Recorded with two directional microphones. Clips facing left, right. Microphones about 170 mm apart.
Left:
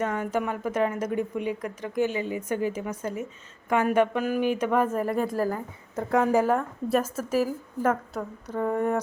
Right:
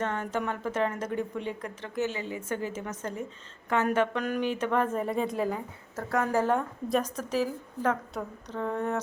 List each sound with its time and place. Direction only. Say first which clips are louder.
0.0 s a woman's voice: left 3 dB; 10° left (ahead or behind)
6.0 s speech: left 5 dB; 15° left (ahead or behind)
6.5 s speech: left 3 dB; 5° left (ahead or behind)